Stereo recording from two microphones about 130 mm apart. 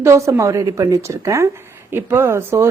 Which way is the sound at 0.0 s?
20° right (ahead or behind).